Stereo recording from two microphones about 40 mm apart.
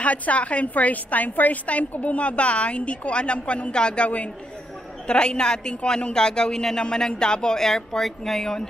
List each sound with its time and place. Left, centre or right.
0.0 s a woman's voice: left; by 8.6 s centre